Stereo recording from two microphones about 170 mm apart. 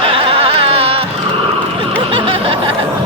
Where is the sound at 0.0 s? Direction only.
30° right (ahead or behind).